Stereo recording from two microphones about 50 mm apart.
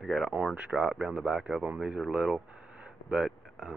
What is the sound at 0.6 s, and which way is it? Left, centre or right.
Speech, right.